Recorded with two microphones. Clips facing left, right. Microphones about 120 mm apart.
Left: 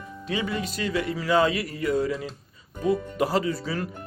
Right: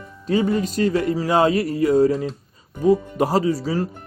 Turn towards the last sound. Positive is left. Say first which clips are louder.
# right 7 dB
turn(degrees=-35)  # may be behind; listen again after turning